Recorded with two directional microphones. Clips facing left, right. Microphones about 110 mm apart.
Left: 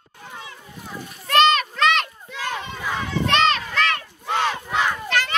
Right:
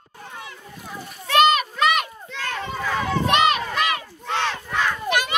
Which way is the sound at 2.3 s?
10° left (ahead or behind).